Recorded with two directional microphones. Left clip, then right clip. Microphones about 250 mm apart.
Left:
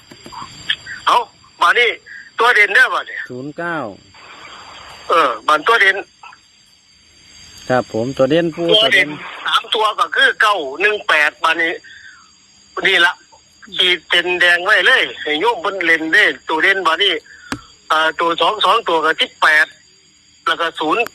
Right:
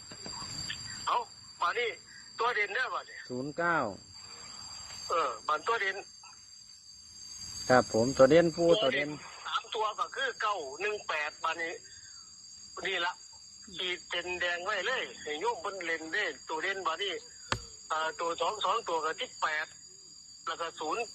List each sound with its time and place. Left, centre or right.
0.7 s a sound: left
3.3 s speech: left
5.0 s speech: left
7.7 s speech: left
8.5 s speech: left